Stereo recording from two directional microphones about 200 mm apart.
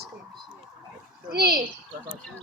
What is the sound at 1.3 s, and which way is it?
Speech, 50° right (ahead or behind).